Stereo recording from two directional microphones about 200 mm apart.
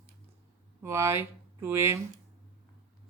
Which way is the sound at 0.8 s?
10° right (ahead or behind).